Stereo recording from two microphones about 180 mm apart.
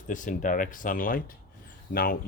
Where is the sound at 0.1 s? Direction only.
45° left (ahead or behind).